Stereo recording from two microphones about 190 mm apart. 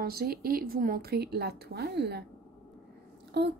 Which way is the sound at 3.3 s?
60° right (ahead or behind).